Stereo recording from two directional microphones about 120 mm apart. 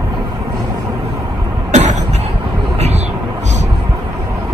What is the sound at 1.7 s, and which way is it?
Cough, 75° right (ahead or behind).